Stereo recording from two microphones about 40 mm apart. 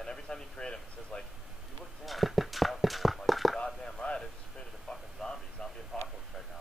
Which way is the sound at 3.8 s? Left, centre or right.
Centre.